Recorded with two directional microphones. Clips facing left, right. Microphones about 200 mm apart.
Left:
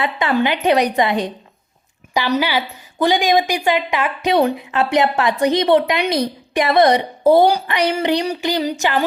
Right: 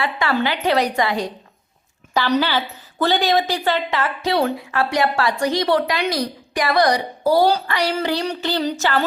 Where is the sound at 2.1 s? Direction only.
10° left (ahead or behind).